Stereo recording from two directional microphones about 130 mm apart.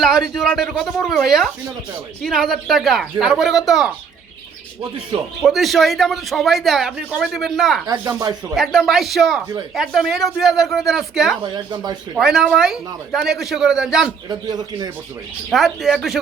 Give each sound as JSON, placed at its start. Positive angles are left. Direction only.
{"t": 0.0, "sound": "speech", "side_deg": 0}
{"t": 5.4, "sound": "speech", "side_deg": 0}
{"t": 7.9, "sound": "speech", "side_deg": -30}
{"t": 8.5, "sound": "speech", "side_deg": 0}
{"t": 11.4, "sound": "speech", "side_deg": -35}
{"t": 12.1, "sound": "speech", "side_deg": -5}
{"t": 14.3, "sound": "speech", "side_deg": -30}
{"t": 15.4, "sound": "speech", "side_deg": 0}